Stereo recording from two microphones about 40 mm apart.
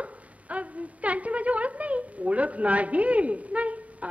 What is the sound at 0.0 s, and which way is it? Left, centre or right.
Speech, right.